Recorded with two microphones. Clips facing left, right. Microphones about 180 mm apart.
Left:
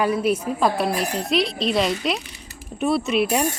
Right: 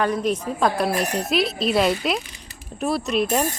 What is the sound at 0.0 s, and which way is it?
Speech, 10° left (ahead or behind).